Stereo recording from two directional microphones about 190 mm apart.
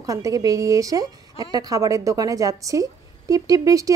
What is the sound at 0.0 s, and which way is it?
A woman's voice, 15° right (ahead or behind).